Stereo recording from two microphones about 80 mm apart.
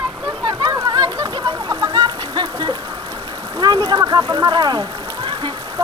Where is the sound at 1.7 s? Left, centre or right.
Right.